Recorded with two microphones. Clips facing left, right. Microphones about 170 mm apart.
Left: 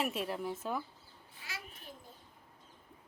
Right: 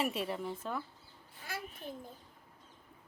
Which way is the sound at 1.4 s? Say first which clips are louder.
Right 5 dB; 50° right (ahead or behind).